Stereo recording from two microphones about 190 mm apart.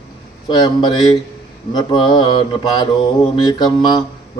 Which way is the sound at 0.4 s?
25° left (ahead or behind).